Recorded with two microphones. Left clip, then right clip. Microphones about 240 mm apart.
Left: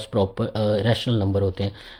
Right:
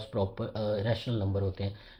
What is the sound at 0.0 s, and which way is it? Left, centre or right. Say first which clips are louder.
Speech: left 9 dB; left.